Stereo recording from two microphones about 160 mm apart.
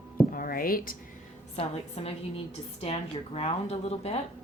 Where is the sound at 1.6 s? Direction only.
40° left (ahead or behind).